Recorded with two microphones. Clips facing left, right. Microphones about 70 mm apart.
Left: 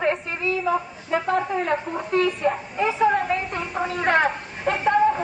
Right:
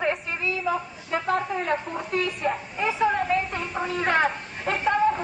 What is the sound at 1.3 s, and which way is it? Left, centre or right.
Speech, centre.